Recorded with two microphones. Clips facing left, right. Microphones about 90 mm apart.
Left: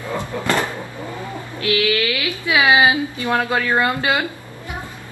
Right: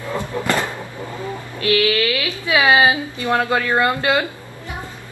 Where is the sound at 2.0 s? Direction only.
25° right (ahead or behind).